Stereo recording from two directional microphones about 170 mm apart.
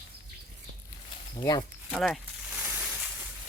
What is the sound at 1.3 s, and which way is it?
Speech, 25° left (ahead or behind).